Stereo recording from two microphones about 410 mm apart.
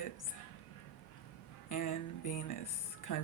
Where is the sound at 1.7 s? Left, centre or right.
Left.